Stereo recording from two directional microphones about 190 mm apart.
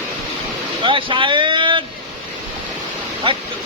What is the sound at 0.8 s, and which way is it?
Speech, 25° right (ahead or behind).